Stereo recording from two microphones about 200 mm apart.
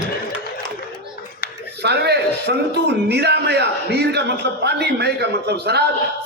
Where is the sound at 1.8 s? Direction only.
55° right (ahead or behind).